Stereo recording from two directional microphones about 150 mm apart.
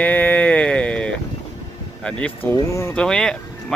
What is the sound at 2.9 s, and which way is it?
Speech, 5° left (ahead or behind).